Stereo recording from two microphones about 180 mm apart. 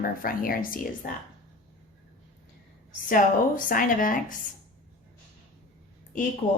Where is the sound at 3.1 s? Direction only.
50° left (ahead or behind).